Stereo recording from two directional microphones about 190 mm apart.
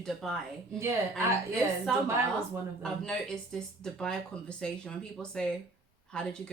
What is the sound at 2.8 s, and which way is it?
Speech, centre (ahead or behind).